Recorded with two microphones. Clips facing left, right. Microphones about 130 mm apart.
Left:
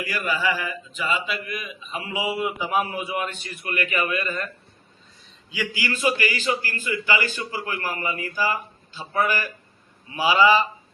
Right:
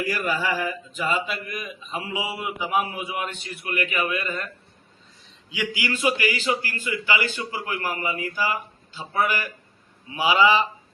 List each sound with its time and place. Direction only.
0.1 s speech: 45° right (ahead or behind)
2.1 s a man's voice: 20° right (ahead or behind)
5.5 s a man's voice: 15° right (ahead or behind)